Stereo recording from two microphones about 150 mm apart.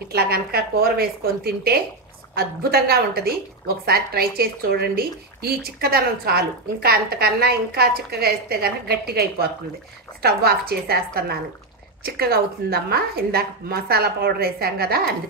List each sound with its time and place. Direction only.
0.1 s a woman's voice: 90° right
12.0 s a woman's voice: 90° right